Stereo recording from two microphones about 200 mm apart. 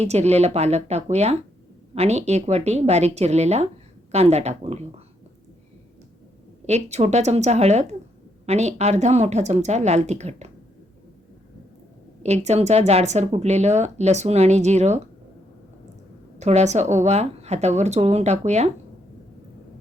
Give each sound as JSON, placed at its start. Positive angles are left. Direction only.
{"t": 0.0, "sound": "speech", "side_deg": -30}
{"t": 6.7, "sound": "speech", "side_deg": -35}
{"t": 12.2, "sound": "speech", "side_deg": -35}
{"t": 16.4, "sound": "speech", "side_deg": -35}